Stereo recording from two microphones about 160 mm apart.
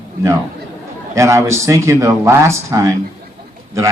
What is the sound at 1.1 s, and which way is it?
Speech, 15° right (ahead or behind).